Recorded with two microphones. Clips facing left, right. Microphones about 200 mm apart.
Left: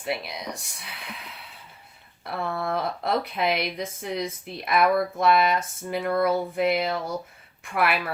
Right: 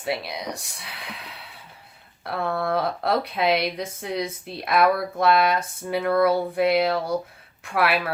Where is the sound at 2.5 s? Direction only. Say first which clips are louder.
Right 4 dB; 60° right (ahead or behind).